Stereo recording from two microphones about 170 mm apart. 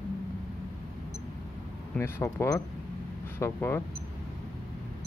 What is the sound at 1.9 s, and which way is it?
Speech, 15° left (ahead or behind).